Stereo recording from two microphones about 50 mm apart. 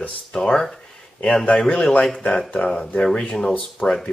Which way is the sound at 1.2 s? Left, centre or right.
Left.